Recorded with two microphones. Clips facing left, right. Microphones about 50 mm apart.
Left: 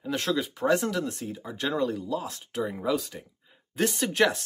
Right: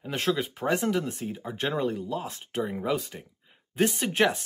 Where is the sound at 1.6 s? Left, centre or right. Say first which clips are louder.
Left 1 dB; right.